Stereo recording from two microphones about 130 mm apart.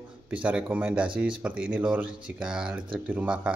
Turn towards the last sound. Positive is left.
turn(degrees=-10)  # may be behind; listen again after turning